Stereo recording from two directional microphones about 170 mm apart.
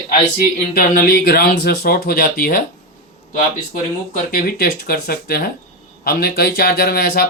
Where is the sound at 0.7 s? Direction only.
60° left (ahead or behind).